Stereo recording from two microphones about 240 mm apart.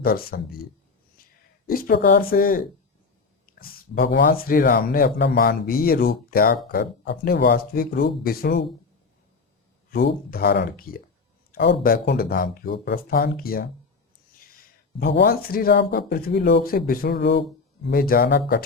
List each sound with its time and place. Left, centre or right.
0.0 s speech: left
1.6 s speech: left
9.9 s speech: left
14.9 s speech: left